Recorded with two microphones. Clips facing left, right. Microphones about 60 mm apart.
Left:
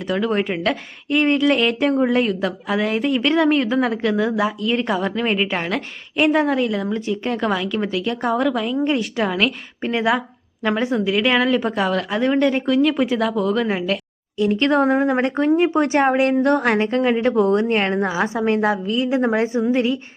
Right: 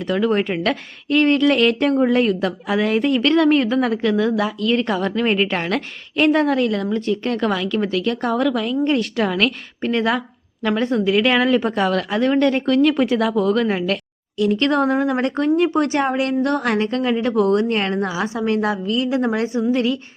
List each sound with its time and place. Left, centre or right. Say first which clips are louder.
0.1 s a woman's voice: right 2 dB; centre
14.3 s a woman's voice: right 1 dB; left
14.6 s a woman's voice: left 3 dB; centre